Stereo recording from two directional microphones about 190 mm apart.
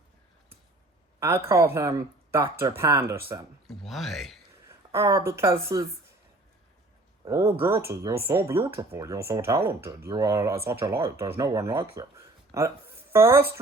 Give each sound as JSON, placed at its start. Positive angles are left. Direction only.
{"t": 1.2, "sound": "speech", "side_deg": -15}
{"t": 3.7, "sound": "speech", "side_deg": 0}
{"t": 4.7, "sound": "speech", "side_deg": -15}
{"t": 7.3, "sound": "speech", "side_deg": -15}